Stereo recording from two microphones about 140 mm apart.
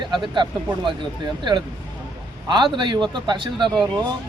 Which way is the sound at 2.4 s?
30° right (ahead or behind).